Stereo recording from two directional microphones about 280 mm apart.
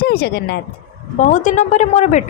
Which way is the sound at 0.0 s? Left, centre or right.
Left.